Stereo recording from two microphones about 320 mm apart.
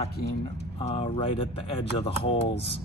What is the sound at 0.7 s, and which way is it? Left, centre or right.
Speech, centre.